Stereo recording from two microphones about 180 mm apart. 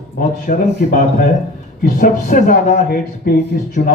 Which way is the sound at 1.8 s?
50° left (ahead or behind).